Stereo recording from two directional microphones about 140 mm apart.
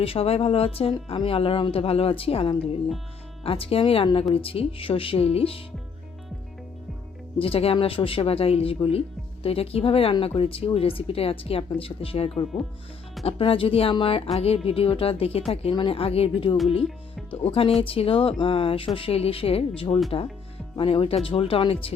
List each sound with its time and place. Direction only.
0.0 s speech: 45° left (ahead or behind)
7.3 s speech: 40° left (ahead or behind)